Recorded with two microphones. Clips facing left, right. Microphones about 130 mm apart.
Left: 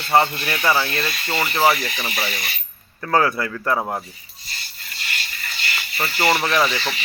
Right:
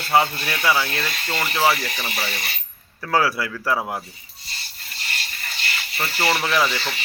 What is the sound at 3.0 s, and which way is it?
Speech, 5° right (ahead or behind).